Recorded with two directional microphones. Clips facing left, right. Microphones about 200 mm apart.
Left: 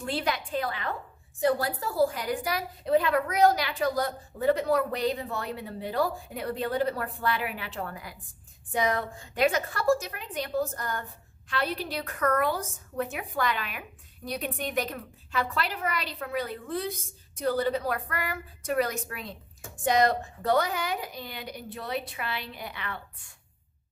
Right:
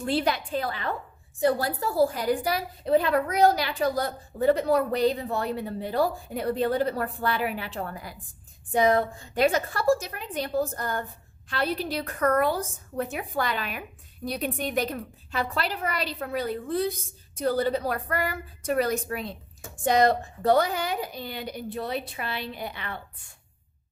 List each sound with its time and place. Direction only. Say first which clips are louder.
0.0 s a woman's voice: right 4 dB; 35° right (ahead or behind)